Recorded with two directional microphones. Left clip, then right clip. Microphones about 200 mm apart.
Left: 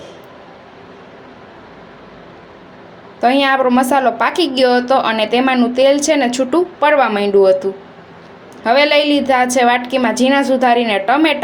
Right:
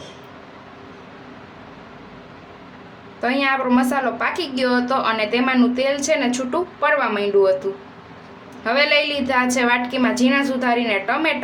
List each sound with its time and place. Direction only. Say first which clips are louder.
3.2 s a woman's voice: left 7 dB; 25° left (ahead or behind)
8.6 s a woman's voice: left 6 dB; 25° left (ahead or behind)